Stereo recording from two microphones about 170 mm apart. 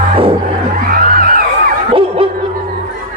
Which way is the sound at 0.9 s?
60° right (ahead or behind).